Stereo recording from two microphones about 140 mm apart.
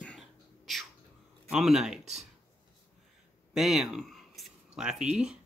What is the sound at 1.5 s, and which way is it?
Speech, 5° right (ahead or behind).